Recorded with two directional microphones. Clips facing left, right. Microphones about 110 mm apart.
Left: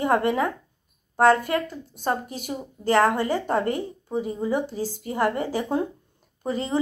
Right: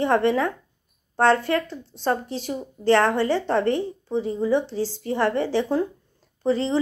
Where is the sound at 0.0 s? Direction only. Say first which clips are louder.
Right 2 dB; 15° left (ahead or behind).